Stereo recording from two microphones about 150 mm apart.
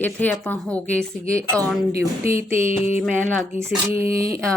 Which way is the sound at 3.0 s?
5° left (ahead or behind).